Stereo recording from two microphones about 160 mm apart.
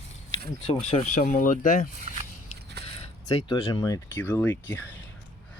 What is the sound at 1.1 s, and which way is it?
Speech, 55° left (ahead or behind).